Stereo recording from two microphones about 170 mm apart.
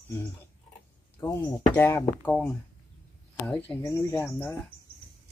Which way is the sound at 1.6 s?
10° left (ahead or behind).